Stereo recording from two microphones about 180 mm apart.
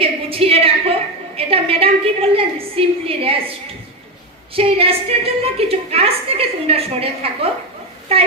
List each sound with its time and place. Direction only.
0.0 s a sound: 30° right (ahead or behind)
1.4 s a woman's voice: 30° right (ahead or behind)
4.5 s a woman's voice: 30° right (ahead or behind)